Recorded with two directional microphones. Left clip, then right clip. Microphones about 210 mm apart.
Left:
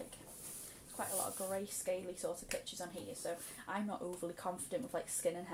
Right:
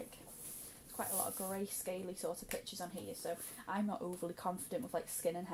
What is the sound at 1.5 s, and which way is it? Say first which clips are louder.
Speech: left 3 dB; 30° right (ahead or behind).